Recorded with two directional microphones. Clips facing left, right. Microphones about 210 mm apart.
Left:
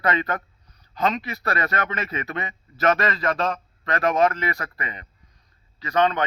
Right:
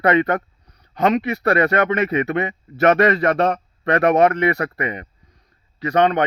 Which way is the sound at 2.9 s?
65° right (ahead or behind).